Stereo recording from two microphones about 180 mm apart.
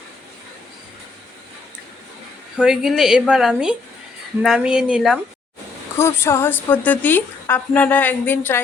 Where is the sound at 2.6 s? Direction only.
Centre (ahead or behind).